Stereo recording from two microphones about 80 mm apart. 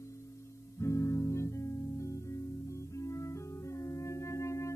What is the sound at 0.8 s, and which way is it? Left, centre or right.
Music, left.